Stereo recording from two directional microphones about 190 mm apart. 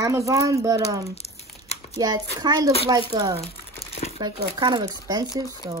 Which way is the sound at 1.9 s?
20° right (ahead or behind).